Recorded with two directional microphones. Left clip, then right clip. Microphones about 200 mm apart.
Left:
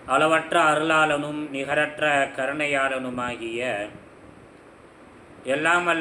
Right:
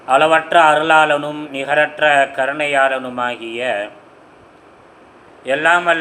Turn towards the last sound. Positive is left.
turn(degrees=15)  # may be behind; listen again after turning